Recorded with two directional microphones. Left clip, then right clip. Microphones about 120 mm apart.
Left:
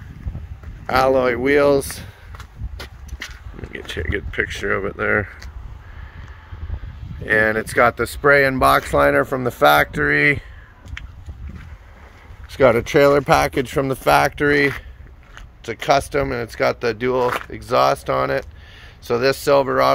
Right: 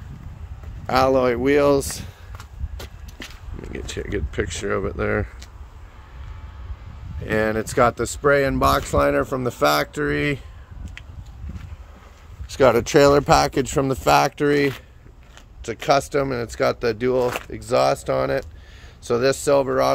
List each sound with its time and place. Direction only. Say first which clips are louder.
0.8 s speech: left 2 dB; 20° right (ahead or behind)
3.7 s speech: left 3 dB; 20° right (ahead or behind)
7.2 s speech: left 5 dB; 20° right (ahead or behind); by 9.4 s 5° right (ahead or behind)
9.6 s speech: left 6 dB; 15° right (ahead or behind)
12.4 s speech: left 1 dB; 45° right (ahead or behind)
13.3 s speech: left 1 dB; 30° right (ahead or behind); by 19.3 s 15° right (ahead or behind)
19.4 s speech: left 3 dB; 15° left (ahead or behind)